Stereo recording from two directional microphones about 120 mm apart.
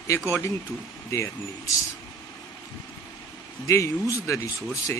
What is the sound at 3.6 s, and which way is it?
A man's voice, 25° left (ahead or behind).